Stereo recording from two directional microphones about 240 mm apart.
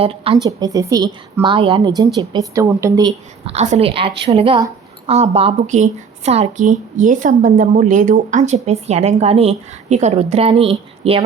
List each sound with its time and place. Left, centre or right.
0.0 s a woman's voice: right